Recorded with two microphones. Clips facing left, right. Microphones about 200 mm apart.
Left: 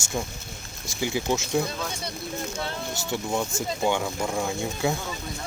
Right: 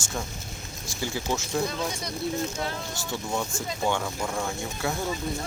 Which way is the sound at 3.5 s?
20° left (ahead or behind).